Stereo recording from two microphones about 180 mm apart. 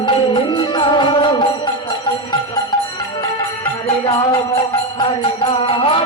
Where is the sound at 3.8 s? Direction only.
30° left (ahead or behind).